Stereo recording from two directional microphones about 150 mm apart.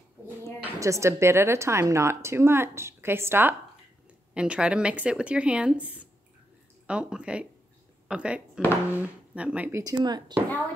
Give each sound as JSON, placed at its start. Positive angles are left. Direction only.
{"t": 0.7, "sound": "a woman's voice", "side_deg": -20}